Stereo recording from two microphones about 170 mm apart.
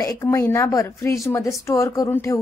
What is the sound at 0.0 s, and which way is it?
A woman's voice, 20° left (ahead or behind).